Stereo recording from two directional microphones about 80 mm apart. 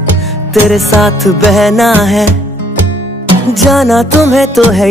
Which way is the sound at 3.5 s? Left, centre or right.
Centre.